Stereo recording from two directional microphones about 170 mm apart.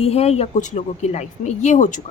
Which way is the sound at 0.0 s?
35° left (ahead or behind).